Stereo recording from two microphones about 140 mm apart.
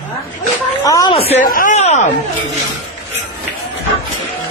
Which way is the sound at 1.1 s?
45° left (ahead or behind).